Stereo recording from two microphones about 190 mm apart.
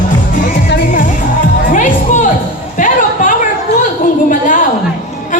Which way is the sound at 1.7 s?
40° left (ahead or behind).